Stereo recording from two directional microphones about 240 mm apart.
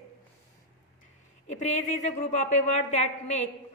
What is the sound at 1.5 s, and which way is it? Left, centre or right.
A woman's voice, left.